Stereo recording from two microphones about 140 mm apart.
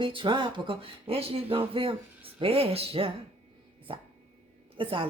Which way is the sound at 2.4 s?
40° right (ahead or behind).